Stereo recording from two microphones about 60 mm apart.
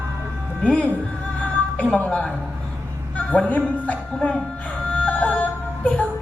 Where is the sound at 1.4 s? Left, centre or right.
Left.